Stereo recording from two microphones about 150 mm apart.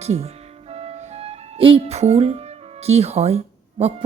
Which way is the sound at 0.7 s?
45° right (ahead or behind).